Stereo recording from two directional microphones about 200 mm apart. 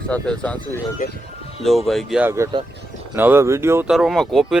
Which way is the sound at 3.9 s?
Centre (ahead or behind).